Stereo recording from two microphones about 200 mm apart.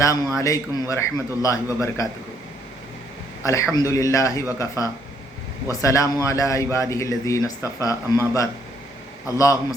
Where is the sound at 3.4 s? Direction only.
15° left (ahead or behind).